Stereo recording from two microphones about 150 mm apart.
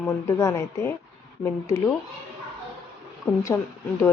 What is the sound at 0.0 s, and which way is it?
Speech, 20° left (ahead or behind).